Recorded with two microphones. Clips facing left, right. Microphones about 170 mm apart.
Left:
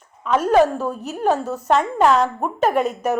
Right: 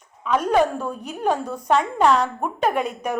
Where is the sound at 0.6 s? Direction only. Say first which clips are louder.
Left 4 dB; 5° left (ahead or behind).